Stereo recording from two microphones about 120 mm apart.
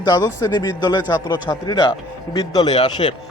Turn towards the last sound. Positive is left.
turn(degrees=40)  # may be behind; listen again after turning